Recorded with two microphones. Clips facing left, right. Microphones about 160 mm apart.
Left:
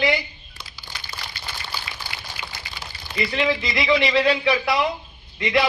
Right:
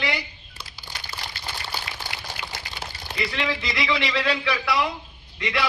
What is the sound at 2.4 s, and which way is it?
Liquid, 55° right (ahead or behind).